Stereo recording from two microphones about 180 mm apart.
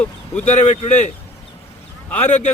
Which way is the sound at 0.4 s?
40° left (ahead or behind).